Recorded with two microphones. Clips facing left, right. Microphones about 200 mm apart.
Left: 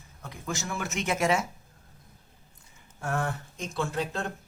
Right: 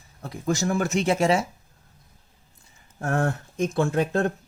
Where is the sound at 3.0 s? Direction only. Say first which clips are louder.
Right 6 dB; 50° right (ahead or behind).